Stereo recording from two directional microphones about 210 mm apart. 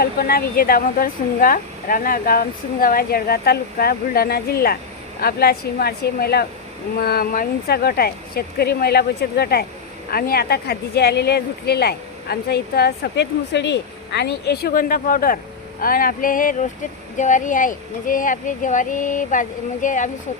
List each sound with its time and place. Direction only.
0.0 s speech: 45° left (ahead or behind)